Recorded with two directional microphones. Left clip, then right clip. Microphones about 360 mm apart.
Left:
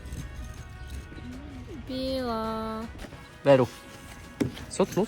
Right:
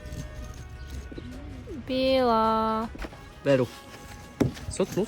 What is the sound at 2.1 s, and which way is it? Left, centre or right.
Music, right.